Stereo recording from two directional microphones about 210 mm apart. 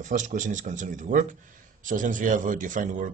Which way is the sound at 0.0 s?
35° right (ahead or behind).